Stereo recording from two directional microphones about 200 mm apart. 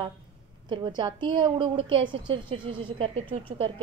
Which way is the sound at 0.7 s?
25° right (ahead or behind).